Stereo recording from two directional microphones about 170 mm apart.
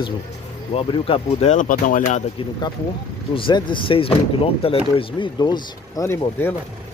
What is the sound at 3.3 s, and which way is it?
A man's voice, 30° left (ahead or behind).